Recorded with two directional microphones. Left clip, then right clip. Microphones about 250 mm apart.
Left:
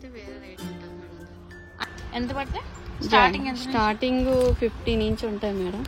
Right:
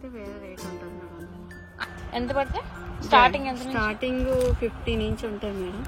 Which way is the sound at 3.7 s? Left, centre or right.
Left.